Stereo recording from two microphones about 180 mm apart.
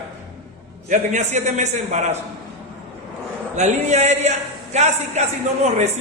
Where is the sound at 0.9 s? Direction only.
40° right (ahead or behind).